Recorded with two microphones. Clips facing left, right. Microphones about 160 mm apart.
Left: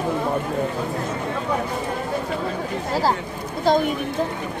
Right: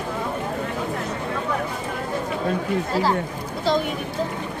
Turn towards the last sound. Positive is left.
turn(degrees=50)  # may be behind; listen again after turning